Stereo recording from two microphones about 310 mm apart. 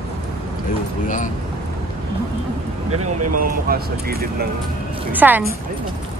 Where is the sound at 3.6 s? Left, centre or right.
Right.